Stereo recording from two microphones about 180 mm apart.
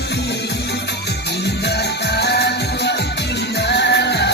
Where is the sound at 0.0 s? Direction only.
70° left (ahead or behind).